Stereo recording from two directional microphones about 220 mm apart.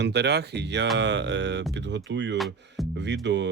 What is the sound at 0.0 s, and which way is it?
Speech, 50° right (ahead or behind).